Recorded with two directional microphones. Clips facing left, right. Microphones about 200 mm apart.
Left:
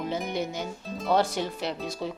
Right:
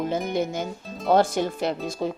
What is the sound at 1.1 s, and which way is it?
Speech, 50° right (ahead or behind).